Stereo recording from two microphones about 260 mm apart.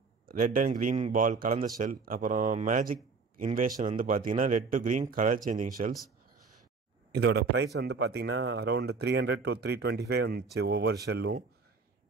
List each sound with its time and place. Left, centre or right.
0.3 s a man's voice: right
7.2 s a man's voice: right